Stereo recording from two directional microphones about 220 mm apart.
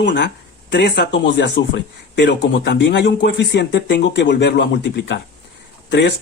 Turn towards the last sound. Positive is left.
turn(degrees=50)  # may be behind; listen again after turning